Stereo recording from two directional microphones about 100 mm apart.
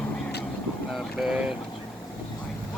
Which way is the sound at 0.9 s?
5° right (ahead or behind).